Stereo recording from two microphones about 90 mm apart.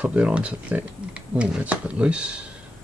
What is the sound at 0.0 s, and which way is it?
Speech, 15° right (ahead or behind).